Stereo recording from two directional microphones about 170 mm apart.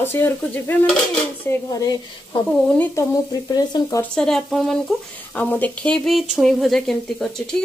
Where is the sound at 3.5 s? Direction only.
20° left (ahead or behind).